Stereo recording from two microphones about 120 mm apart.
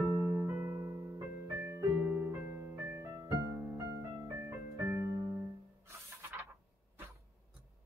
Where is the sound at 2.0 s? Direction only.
20° right (ahead or behind).